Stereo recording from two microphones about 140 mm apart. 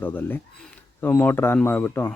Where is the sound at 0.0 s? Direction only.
15° left (ahead or behind).